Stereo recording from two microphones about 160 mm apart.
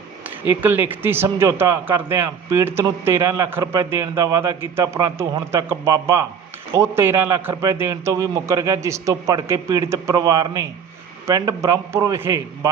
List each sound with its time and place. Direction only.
0.3 s a man's voice: 10° right (ahead or behind)